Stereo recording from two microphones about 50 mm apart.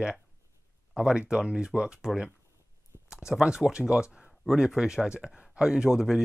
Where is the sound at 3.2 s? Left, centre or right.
Centre.